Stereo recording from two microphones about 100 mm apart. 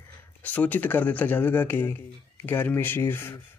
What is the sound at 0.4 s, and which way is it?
Speech, 15° left (ahead or behind).